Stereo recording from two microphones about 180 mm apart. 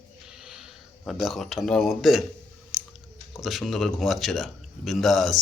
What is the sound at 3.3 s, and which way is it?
A man's voice, centre (ahead or behind).